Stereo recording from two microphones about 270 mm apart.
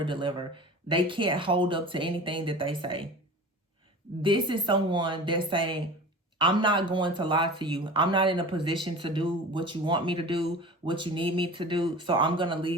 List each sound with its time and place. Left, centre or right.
0.0 s speech: centre
4.2 s speech: centre